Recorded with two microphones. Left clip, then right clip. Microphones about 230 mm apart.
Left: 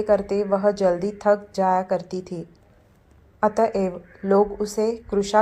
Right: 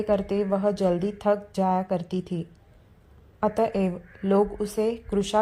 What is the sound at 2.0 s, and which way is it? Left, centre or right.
Speech, right.